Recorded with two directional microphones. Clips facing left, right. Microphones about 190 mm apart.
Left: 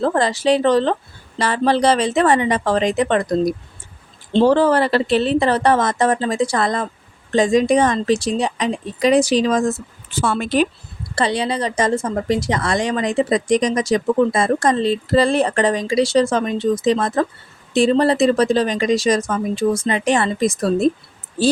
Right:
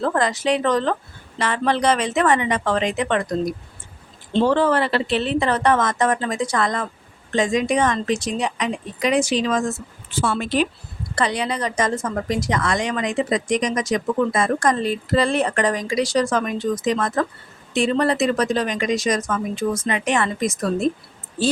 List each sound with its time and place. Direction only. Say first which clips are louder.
0.0 s speech: left 3 dB; 30° left (ahead or behind)
10.2 s speech: left 3 dB; 50° left (ahead or behind)
11.1 s a woman's voice: left 3 dB; 30° left (ahead or behind)